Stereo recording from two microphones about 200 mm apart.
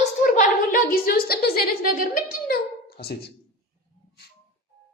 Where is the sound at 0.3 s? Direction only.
45° left (ahead or behind).